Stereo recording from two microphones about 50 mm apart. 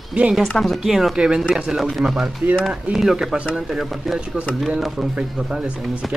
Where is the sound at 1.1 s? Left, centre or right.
Centre.